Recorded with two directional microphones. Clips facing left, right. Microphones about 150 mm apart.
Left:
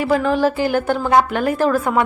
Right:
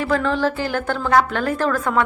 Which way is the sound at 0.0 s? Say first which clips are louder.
Left 3 dB; 10° left (ahead or behind).